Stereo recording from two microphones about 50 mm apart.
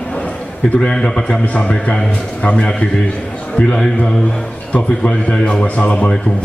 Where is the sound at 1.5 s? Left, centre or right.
Left.